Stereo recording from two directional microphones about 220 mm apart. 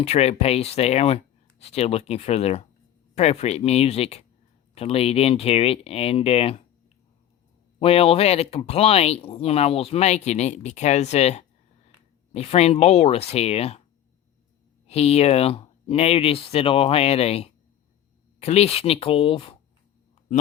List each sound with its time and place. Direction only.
0.0 s speech: 30° left (ahead or behind)
7.8 s speech: 25° left (ahead or behind)
14.8 s speech: 30° left (ahead or behind)